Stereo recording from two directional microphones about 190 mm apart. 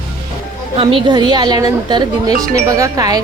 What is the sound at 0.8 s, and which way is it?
A woman's voice, 25° right (ahead or behind).